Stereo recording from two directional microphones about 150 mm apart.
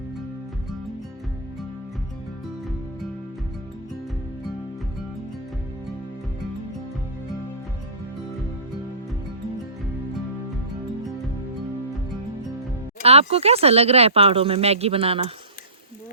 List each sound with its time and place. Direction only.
13.0 s speech: 40° right (ahead or behind)